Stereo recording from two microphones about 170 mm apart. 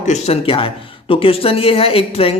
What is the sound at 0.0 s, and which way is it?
Speech, 40° left (ahead or behind).